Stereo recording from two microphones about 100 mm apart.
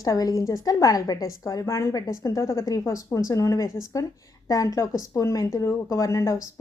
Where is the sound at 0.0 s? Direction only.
40° left (ahead or behind).